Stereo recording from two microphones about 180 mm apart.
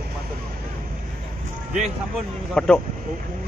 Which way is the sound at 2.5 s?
5° left (ahead or behind).